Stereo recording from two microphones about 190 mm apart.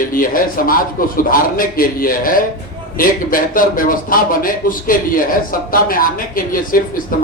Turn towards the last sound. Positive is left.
turn(degrees=45)  # may be behind; listen again after turning